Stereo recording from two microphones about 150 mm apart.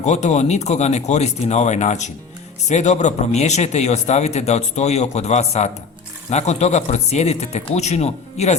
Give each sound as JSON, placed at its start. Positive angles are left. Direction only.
{"t": 0.0, "sound": "a man's voice", "side_deg": 50}